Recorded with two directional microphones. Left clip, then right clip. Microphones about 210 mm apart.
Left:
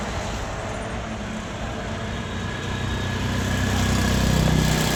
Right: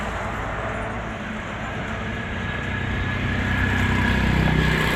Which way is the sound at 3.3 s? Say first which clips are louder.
Right 3 dB; 55° left (ahead or behind).